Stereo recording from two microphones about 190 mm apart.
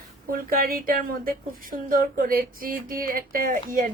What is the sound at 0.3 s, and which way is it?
A woman's voice, 50° right (ahead or behind).